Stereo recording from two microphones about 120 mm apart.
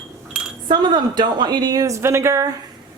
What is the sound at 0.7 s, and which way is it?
Speech, 40° right (ahead or behind).